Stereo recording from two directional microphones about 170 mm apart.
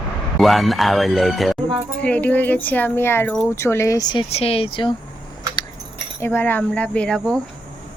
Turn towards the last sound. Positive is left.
turn(degrees=5)  # may be behind; listen again after turning